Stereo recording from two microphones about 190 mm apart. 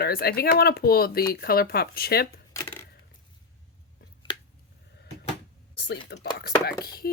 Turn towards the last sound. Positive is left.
turn(degrees=55)  # may be behind; listen again after turning